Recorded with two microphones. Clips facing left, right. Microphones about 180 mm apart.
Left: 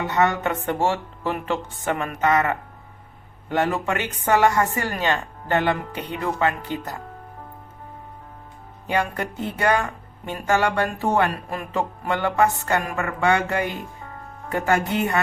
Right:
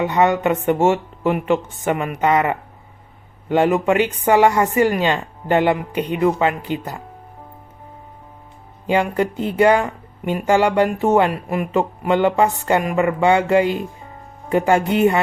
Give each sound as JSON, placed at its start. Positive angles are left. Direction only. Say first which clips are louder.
{"t": 0.0, "sound": "speech", "louder": "right 5 dB", "side_deg": -20}
{"t": 8.9, "sound": "speech", "louder": "right 6 dB", "side_deg": -20}